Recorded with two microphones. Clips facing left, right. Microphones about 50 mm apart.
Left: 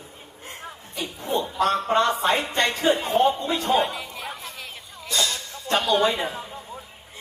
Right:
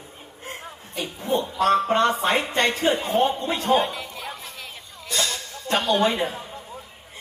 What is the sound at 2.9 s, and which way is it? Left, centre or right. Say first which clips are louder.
Speech: left 2 dB; left.